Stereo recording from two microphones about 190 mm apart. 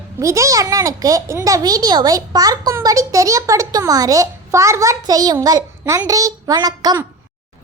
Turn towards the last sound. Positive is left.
turn(degrees=-20)  # may be behind; listen again after turning